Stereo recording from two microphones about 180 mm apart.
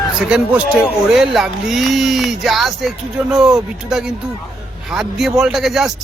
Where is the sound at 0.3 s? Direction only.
5° right (ahead or behind).